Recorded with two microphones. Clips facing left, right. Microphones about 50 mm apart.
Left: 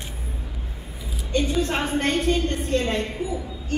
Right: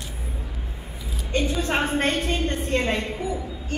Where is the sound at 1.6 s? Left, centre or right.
Right.